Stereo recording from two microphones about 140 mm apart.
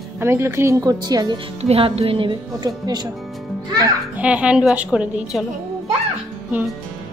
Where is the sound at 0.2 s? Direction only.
20° right (ahead or behind).